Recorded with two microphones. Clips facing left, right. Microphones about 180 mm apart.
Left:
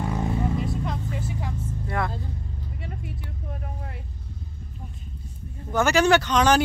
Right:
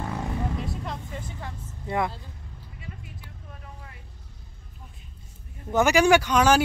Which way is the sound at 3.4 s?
45° left (ahead or behind).